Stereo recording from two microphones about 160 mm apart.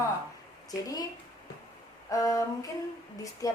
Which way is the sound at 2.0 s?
20° left (ahead or behind).